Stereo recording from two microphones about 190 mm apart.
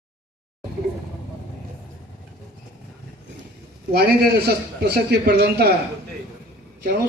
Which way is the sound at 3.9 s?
55° right (ahead or behind).